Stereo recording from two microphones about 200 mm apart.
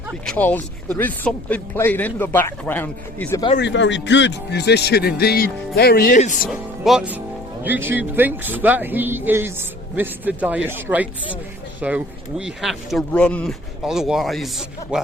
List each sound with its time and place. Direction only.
0.3 s speech: 10° left (ahead or behind)
3.6 s speech: 65° left (ahead or behind); by 6.5 s 40° left (ahead or behind)
6.5 s speech: centre (ahead or behind)